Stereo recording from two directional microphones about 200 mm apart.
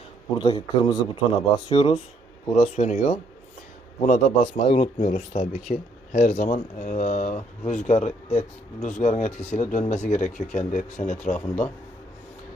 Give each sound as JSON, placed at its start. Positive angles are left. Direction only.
{"t": 0.3, "sound": "speech", "side_deg": 25}
{"t": 4.4, "sound": "speech", "side_deg": 25}
{"t": 6.1, "sound": "speech", "side_deg": 35}
{"t": 11.3, "sound": "a man's voice", "side_deg": 10}